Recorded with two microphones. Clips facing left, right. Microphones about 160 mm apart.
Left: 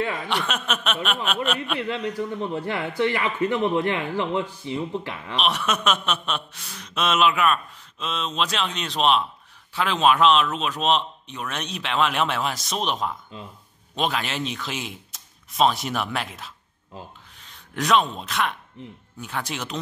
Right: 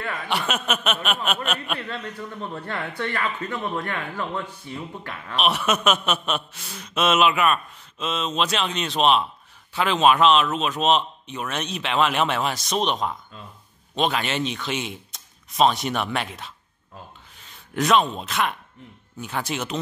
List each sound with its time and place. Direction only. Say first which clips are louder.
0.3 s speech: right 1 dB; 5° right (ahead or behind)
2.0 s speech: left 6 dB; 15° left (ahead or behind)
5.3 s speech: right 2 dB; 5° right (ahead or behind)